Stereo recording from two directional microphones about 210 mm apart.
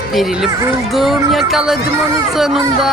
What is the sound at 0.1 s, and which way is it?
Speech, centre (ahead or behind).